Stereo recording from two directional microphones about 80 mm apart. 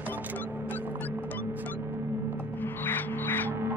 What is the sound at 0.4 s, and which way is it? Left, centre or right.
Music, left.